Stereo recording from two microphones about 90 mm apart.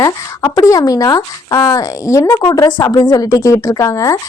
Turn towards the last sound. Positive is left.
turn(degrees=35)  # may be behind; listen again after turning